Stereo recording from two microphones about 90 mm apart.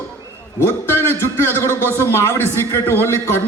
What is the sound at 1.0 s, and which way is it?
A man's voice, 25° left (ahead or behind).